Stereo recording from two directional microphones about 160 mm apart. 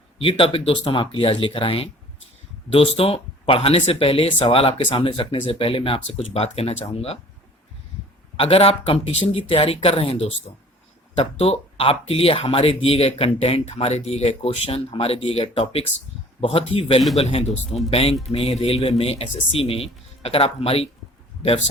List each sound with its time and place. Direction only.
0.2 s speech: 35° left (ahead or behind)
8.4 s speech: 35° left (ahead or behind)